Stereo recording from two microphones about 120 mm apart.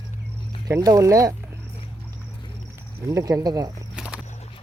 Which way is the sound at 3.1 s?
30° right (ahead or behind).